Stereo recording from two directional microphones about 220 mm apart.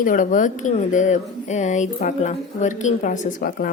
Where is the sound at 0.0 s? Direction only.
35° left (ahead or behind).